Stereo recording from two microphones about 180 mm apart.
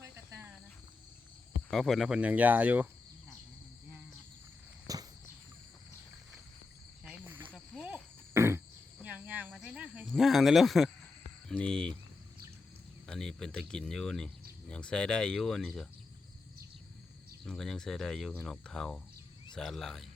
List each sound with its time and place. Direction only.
0.0 s cricket: 15° right (ahead or behind)
1.7 s speech: centre (ahead or behind)
4.9 s cricket: 20° right (ahead or behind)
7.0 s cricket: 5° right (ahead or behind)
11.4 s speech: 5° left (ahead or behind)
13.1 s speech: 5° left (ahead or behind)
17.4 s speech: centre (ahead or behind)